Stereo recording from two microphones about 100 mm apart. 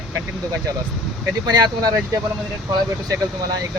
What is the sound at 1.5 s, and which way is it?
Speech, 40° right (ahead or behind).